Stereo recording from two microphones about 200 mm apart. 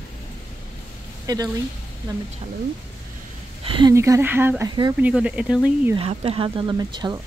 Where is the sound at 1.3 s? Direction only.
20° right (ahead or behind).